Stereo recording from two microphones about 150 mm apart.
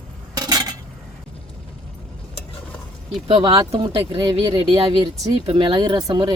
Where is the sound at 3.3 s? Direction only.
30° right (ahead or behind).